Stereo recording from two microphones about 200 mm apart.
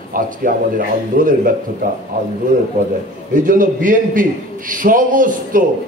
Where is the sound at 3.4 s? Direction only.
40° right (ahead or behind).